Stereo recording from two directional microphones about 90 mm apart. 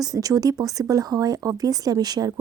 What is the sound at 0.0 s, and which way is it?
A woman's voice, 40° right (ahead or behind).